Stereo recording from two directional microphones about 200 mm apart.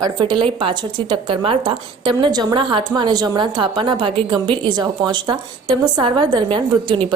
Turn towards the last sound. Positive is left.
turn(degrees=-25)  # may be behind; listen again after turning